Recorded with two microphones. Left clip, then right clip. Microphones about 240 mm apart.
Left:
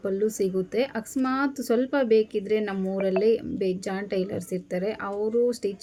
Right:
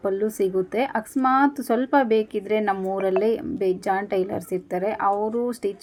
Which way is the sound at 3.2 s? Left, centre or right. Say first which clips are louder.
Right 1 dB; right.